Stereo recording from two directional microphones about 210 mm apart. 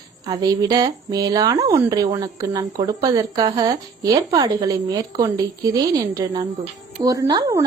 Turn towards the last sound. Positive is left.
turn(degrees=-15)  # may be behind; listen again after turning